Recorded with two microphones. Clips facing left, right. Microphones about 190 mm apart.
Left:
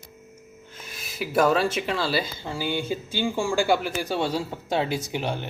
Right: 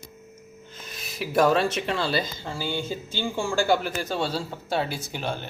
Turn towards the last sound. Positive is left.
turn(degrees=15)  # may be behind; listen again after turning